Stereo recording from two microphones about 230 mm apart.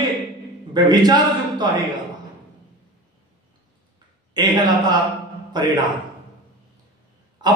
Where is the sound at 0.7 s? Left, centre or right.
Centre.